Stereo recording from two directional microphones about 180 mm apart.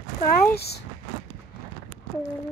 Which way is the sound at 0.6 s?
65° left (ahead or behind).